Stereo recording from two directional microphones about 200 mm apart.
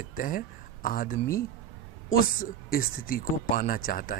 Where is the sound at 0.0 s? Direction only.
40° left (ahead or behind).